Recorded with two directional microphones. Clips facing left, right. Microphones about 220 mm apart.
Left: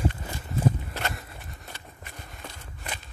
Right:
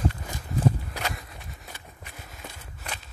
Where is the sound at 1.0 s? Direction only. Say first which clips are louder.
Even; centre (ahead or behind).